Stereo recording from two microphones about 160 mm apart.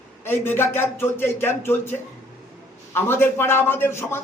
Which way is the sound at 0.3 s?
15° left (ahead or behind).